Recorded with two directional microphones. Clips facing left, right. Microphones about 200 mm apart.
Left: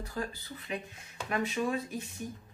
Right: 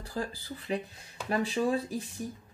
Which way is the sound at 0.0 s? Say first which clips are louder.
Right 2 dB; 30° right (ahead or behind).